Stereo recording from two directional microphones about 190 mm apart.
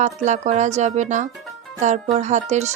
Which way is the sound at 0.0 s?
40° right (ahead or behind).